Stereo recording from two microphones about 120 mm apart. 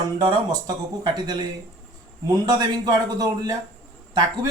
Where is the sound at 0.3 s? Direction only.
35° right (ahead or behind).